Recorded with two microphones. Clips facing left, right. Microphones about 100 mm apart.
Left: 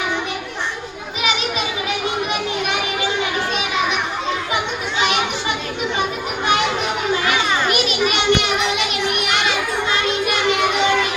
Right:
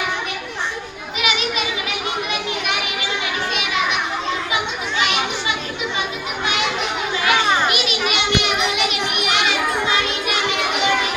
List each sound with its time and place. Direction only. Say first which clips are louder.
7.7 s children playing: left 3 dB; 40° left (ahead or behind)